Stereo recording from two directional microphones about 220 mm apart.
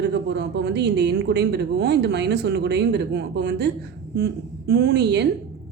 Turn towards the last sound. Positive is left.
turn(degrees=-50)  # may be behind; listen again after turning